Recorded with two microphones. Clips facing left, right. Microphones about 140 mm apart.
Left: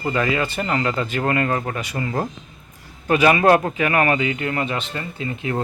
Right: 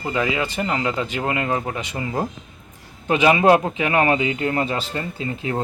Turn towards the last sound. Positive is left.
turn(degrees=-30)  # may be behind; listen again after turning